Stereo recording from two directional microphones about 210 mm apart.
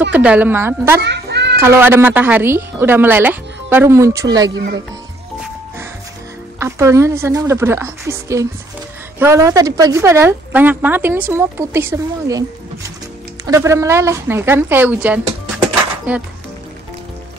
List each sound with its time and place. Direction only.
0.1 s a woman's voice: 5° right (ahead or behind)
1.0 s music: 55° right (ahead or behind)
1.6 s a woman's voice: 10° right (ahead or behind)
6.6 s a woman's voice: 15° right (ahead or behind)
13.5 s a woman's voice: 15° right (ahead or behind)